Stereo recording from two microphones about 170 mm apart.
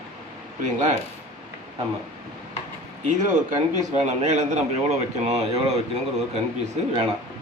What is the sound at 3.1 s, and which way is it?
A man's voice, 45° right (ahead or behind).